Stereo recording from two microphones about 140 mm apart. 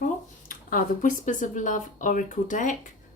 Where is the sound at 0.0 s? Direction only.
75° left (ahead or behind).